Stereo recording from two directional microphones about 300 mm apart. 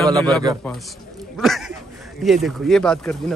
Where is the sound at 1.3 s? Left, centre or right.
Centre.